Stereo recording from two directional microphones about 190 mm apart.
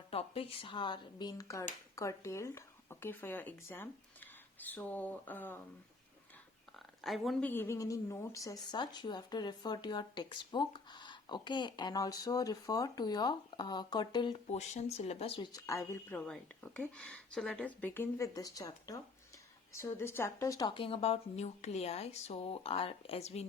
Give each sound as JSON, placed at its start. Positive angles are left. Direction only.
{"t": 0.1, "sound": "speech", "side_deg": 30}
{"t": 6.7, "sound": "speech", "side_deg": 0}
{"t": 14.6, "sound": "speech", "side_deg": 35}